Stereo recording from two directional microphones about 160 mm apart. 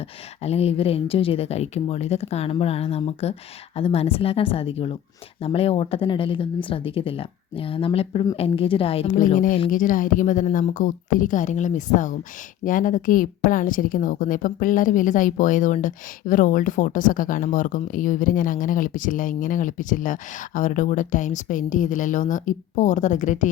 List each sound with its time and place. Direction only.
0.4 s speech: 40° left (ahead or behind)
9.1 s a woman's voice: 55° left (ahead or behind)